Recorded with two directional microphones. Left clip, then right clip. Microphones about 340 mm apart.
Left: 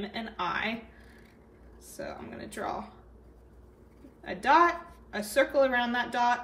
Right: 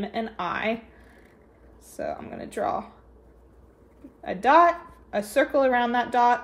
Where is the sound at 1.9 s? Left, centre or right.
Right.